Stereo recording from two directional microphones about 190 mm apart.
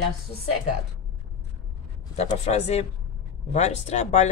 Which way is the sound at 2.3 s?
35° left (ahead or behind).